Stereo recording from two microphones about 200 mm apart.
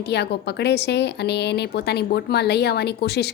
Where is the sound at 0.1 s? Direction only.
55° left (ahead or behind).